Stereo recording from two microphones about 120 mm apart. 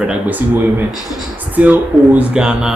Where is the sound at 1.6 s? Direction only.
15° right (ahead or behind).